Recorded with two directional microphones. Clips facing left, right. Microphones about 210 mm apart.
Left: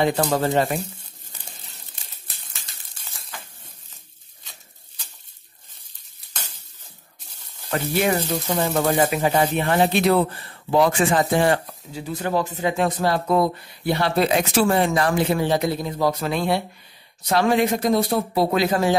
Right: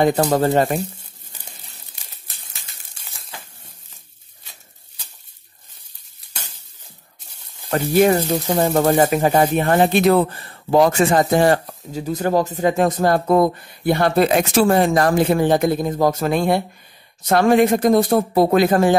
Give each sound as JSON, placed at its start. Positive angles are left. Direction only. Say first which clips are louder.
{"t": 0.0, "sound": "speech", "louder": "right 4 dB", "side_deg": -40}
{"t": 7.7, "sound": "speech", "louder": "right 6 dB", "side_deg": -45}